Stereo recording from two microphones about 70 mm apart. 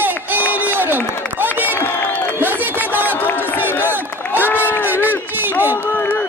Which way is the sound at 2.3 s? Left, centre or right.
Right.